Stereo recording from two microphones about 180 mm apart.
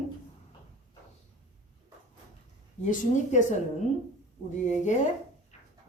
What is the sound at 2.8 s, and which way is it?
Speech, 40° left (ahead or behind).